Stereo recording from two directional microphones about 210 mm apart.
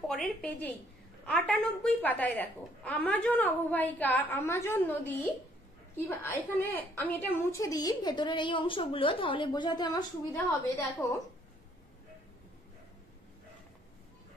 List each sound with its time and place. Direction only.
0.1 s a woman's voice: 5° left (ahead or behind)
11.0 s a woman's voice: 5° left (ahead or behind)